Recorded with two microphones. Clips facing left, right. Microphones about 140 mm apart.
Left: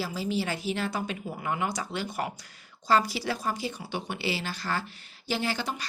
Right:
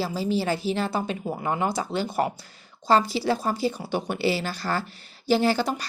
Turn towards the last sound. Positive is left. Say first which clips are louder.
# right 9 dB
turn(degrees=-40)  # may be behind; listen again after turning